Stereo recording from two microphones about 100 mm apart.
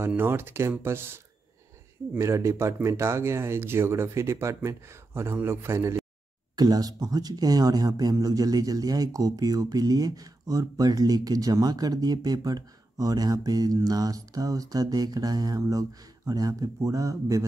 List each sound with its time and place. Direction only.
0.1 s speech: 20° right (ahead or behind)
6.5 s speech: 40° right (ahead or behind)